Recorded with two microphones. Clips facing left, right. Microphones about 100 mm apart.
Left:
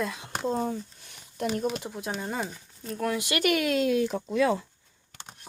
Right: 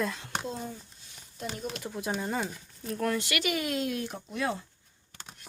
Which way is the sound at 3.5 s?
90° left.